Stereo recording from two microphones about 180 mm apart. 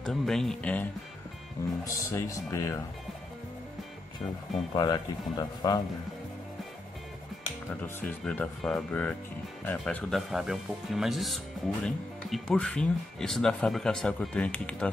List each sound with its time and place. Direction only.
0.0 s speech: centre (ahead or behind)
1.9 s speech: 15° left (ahead or behind)
4.7 s speech: 25° left (ahead or behind)
8.2 s speech: 5° left (ahead or behind)